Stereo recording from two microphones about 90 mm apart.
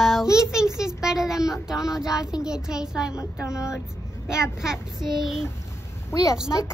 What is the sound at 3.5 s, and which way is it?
Speech, 35° left (ahead or behind).